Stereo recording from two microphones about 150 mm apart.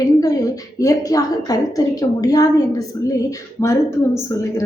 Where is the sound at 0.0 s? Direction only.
25° left (ahead or behind).